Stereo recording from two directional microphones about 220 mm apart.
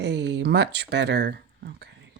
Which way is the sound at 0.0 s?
50° right (ahead or behind).